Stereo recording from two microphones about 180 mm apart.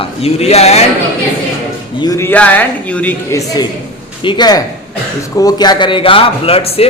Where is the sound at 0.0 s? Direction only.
35° left (ahead or behind).